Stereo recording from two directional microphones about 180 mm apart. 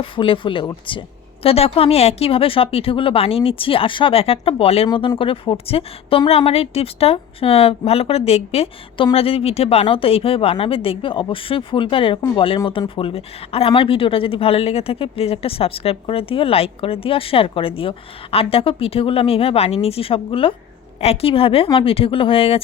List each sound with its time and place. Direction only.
0.0 s a woman's voice: 30° left (ahead or behind)